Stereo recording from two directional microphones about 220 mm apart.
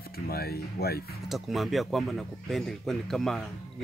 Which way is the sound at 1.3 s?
Centre (ahead or behind).